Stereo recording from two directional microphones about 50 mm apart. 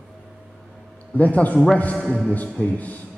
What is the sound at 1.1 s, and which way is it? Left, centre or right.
Speech, left.